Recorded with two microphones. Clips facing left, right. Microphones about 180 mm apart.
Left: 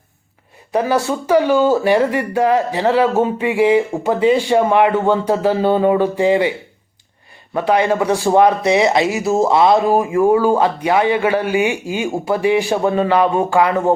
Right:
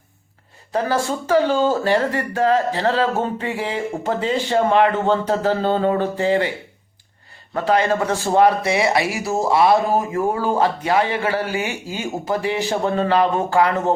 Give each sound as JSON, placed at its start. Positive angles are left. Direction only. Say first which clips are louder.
{"t": 0.7, "sound": "speech", "louder": "left 4 dB", "side_deg": 15}
{"t": 7.5, "sound": "speech", "louder": "left 3 dB", "side_deg": 15}